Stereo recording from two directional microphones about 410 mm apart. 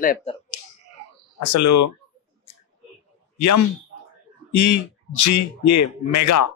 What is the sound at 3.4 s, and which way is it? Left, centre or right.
Speech, left.